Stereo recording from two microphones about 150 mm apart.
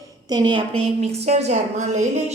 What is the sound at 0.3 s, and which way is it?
Speech, 30° right (ahead or behind).